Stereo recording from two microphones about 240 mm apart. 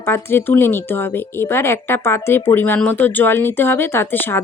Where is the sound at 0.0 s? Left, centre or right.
Centre.